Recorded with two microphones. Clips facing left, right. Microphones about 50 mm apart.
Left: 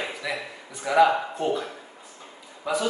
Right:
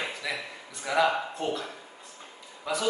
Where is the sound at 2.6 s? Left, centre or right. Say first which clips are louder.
Left 4 dB; centre.